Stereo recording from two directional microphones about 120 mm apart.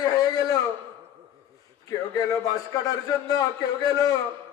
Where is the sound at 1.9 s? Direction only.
30° left (ahead or behind).